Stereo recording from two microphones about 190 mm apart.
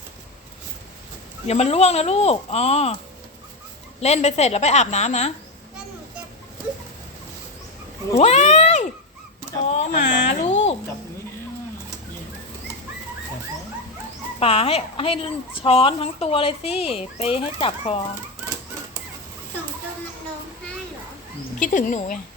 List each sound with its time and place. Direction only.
1.5 s speech: 35° left (ahead or behind)
4.0 s speech: 35° left (ahead or behind)
8.2 s speech: 35° left (ahead or behind)
14.3 s speech: 30° left (ahead or behind)
21.6 s speech: 45° left (ahead or behind)